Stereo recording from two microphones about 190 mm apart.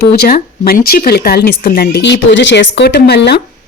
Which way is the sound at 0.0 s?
55° left (ahead or behind).